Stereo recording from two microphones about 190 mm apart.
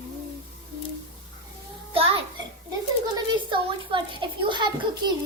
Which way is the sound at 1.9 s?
30° right (ahead or behind).